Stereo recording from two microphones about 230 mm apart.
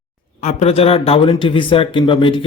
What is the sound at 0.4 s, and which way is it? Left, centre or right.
Speech, left.